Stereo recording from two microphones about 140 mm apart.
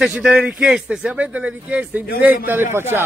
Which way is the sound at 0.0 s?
5° right (ahead or behind).